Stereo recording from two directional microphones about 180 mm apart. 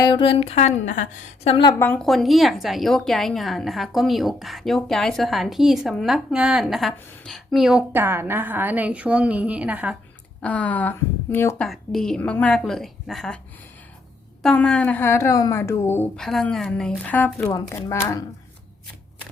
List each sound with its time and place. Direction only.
0.0 s a woman's voice: 30° left (ahead or behind)
1.8 s speech: 5° left (ahead or behind)
10.4 s speech: 10° left (ahead or behind)
14.4 s a woman's voice: 5° left (ahead or behind)